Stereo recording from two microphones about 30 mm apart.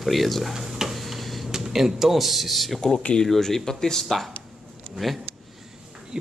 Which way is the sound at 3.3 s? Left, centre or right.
Centre.